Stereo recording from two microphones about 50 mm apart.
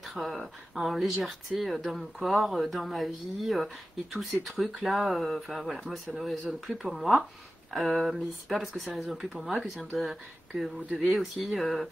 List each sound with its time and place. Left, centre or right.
0.0 s speech: centre